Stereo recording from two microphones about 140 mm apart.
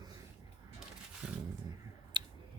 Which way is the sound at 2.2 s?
35° right (ahead or behind).